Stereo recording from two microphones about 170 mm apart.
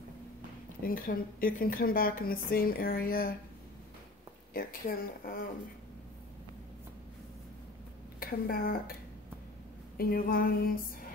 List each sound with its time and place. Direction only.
0.8 s speech: 55° left (ahead or behind)
4.6 s speech: 55° left (ahead or behind)
8.2 s a woman's voice: 60° left (ahead or behind)
9.9 s speech: 60° left (ahead or behind)